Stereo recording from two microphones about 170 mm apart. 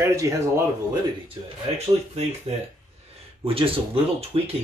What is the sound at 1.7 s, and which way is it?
Speech, 40° right (ahead or behind).